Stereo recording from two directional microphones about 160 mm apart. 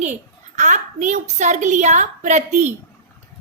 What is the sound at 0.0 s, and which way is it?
A woman's voice, 50° right (ahead or behind).